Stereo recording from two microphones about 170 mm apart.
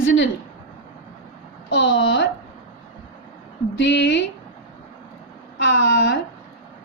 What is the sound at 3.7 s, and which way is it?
Speech, 90° left.